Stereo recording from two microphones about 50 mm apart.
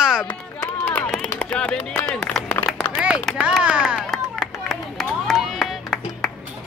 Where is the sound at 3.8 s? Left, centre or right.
Centre.